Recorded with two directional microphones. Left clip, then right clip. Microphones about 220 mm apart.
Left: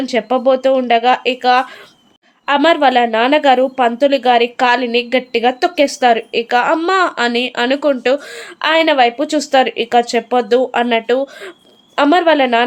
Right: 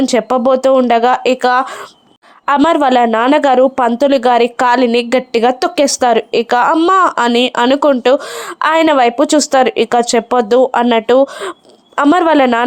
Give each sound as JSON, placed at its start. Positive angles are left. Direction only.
{"t": 0.0, "sound": "a woman's voice", "side_deg": -25}